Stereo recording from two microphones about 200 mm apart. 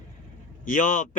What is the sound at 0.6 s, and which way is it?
Speech, 40° left (ahead or behind).